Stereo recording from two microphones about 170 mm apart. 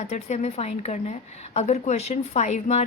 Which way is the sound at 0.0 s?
45° left (ahead or behind).